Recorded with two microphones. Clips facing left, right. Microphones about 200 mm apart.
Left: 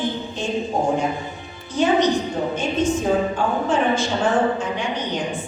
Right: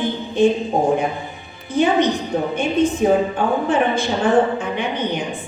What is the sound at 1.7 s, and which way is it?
A woman's voice, 55° right (ahead or behind).